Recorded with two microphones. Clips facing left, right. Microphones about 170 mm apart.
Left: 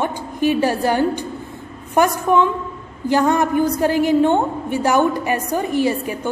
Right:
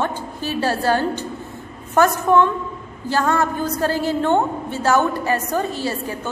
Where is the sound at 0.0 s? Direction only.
15° left (ahead or behind).